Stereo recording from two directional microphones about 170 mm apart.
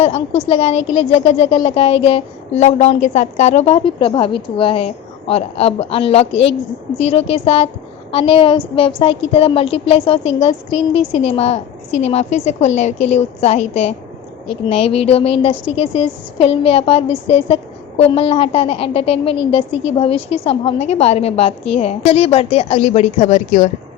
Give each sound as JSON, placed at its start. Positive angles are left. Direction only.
{"t": 0.0, "sound": "a woman's voice", "side_deg": 35}